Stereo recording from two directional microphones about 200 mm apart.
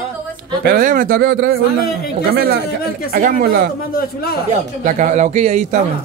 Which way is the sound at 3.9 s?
50° left (ahead or behind).